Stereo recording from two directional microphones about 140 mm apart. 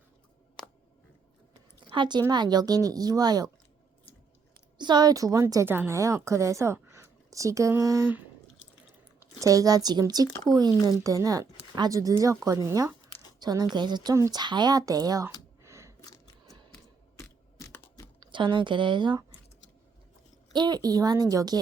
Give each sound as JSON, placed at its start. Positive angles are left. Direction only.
{"t": 1.9, "sound": "a woman's voice", "side_deg": -35}
{"t": 4.8, "sound": "a woman's voice", "side_deg": -30}
{"t": 9.4, "sound": "a woman's voice", "side_deg": -25}
{"t": 15.6, "sound": "a sound", "side_deg": -20}
{"t": 16.0, "sound": "a sound", "side_deg": 25}
{"t": 16.7, "sound": "crushing", "side_deg": 15}
{"t": 18.2, "sound": "speech", "side_deg": -35}
{"t": 20.5, "sound": "a woman's voice", "side_deg": -30}